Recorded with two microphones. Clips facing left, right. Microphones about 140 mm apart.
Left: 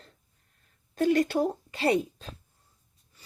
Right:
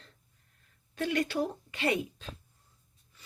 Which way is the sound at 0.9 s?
40° left (ahead or behind).